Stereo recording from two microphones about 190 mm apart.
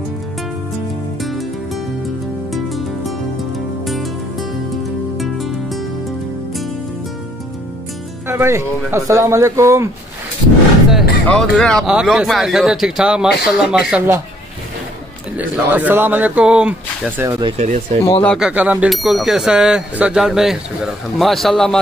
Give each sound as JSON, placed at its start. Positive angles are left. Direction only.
{"t": 2.5, "sound": "music", "side_deg": 0}
{"t": 8.3, "sound": "speech", "side_deg": -15}
{"t": 10.9, "sound": "speech", "side_deg": 0}
{"t": 15.3, "sound": "speech", "side_deg": -10}
{"t": 17.3, "sound": "speech", "side_deg": -25}
{"t": 17.6, "sound": "speech", "side_deg": -40}
{"t": 18.2, "sound": "speech", "side_deg": 5}
{"t": 18.5, "sound": "speech", "side_deg": -5}